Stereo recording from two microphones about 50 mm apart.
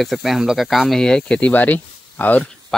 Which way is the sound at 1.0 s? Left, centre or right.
Centre.